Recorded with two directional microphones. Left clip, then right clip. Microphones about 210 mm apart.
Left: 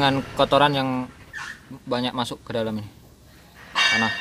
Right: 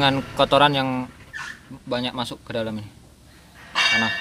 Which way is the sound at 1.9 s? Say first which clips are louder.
Left 1 dB; 15° left (ahead or behind).